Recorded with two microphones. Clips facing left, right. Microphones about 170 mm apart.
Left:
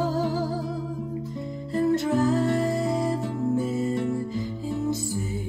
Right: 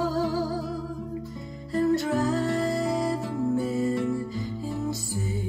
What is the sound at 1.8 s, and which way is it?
Music, 20° left (ahead or behind).